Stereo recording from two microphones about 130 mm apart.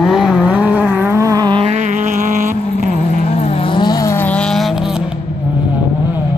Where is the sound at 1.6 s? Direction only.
60° right (ahead or behind); by 2.9 s 90° right.